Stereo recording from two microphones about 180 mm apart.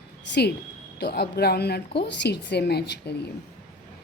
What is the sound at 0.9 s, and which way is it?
Speech, 65° left (ahead or behind).